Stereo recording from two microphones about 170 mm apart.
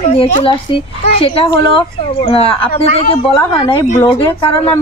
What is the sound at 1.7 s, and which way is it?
A woman's voice, 30° left (ahead or behind).